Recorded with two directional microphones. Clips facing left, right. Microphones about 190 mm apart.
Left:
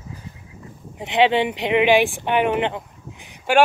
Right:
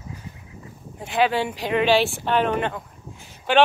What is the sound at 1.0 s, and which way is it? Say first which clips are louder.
Speech: left 4 dB; 20° left (ahead or behind).